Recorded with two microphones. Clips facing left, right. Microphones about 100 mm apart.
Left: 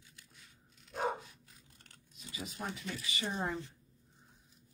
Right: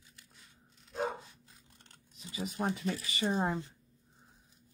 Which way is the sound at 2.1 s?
30° right (ahead or behind).